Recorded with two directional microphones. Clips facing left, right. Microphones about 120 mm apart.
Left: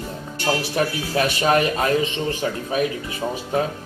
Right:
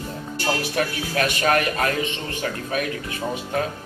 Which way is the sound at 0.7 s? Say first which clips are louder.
Left 2 dB; 25° left (ahead or behind).